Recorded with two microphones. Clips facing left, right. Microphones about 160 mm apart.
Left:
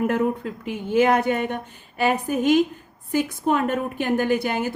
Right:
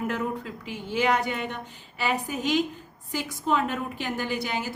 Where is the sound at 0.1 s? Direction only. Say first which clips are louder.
Left 7 dB; 55° left (ahead or behind).